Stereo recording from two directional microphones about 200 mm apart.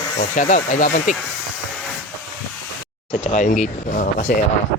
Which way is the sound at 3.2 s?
35° left (ahead or behind).